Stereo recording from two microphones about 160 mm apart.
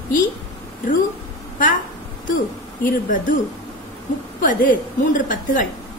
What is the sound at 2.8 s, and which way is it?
Speech, 55° left (ahead or behind).